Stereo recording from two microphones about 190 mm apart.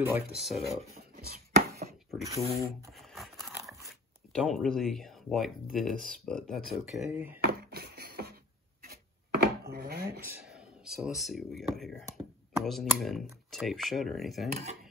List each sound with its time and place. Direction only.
0.3 s speech: centre (ahead or behind)
1.1 s chopping: 55° right (ahead or behind)
2.5 s a sound: centre (ahead or behind)
4.3 s speech: centre (ahead or behind)
7.4 s a sound: 55° right (ahead or behind)
10.2 s speech: 5° right (ahead or behind)
14.5 s speech: 35° right (ahead or behind)